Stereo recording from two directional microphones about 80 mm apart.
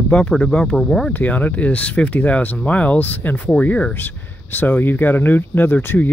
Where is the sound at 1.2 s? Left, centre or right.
Centre.